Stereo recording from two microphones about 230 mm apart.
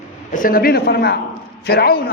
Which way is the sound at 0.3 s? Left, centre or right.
Left.